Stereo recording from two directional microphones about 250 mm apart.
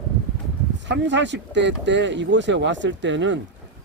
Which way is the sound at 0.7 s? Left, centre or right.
Right.